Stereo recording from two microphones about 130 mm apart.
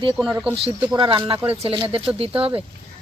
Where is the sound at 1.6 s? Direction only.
45° right (ahead or behind).